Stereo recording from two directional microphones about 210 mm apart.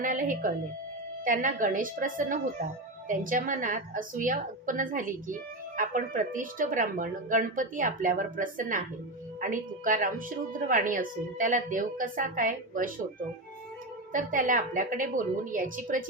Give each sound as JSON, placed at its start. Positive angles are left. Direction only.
{"t": 0.0, "sound": "a woman's voice", "side_deg": -40}
{"t": 14.1, "sound": "a woman's voice", "side_deg": -40}